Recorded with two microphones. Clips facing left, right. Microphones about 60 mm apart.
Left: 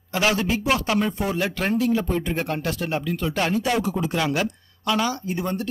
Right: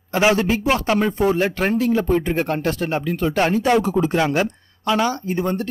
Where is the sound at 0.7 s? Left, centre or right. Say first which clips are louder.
Right 2 dB; right.